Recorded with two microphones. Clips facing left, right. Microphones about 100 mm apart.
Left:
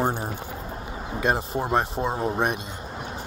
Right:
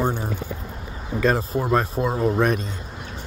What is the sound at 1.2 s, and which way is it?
Speech, 20° left (ahead or behind).